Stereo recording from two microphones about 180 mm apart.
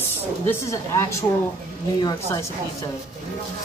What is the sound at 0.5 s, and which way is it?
A woman's voice, 15° left (ahead or behind).